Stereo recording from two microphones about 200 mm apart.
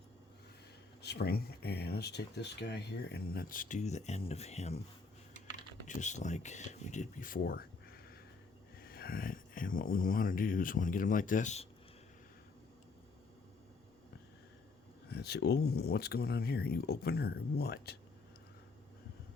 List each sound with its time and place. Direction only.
1.0 s speech: 50° left (ahead or behind); by 4.8 s 35° left (ahead or behind)
5.9 s speech: 35° left (ahead or behind)
15.1 s speech: 55° left (ahead or behind)